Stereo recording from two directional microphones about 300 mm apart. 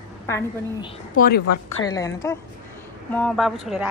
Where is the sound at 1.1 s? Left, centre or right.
Left.